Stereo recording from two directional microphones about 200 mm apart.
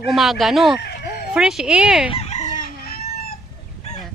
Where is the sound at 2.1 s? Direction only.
30° left (ahead or behind).